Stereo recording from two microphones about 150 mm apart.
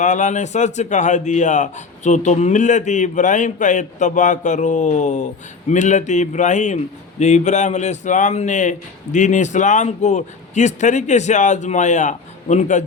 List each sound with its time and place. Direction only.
0.0 s a man's voice: 55° left (ahead or behind)